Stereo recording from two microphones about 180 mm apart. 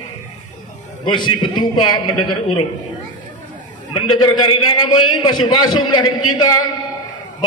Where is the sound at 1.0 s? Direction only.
25° left (ahead or behind).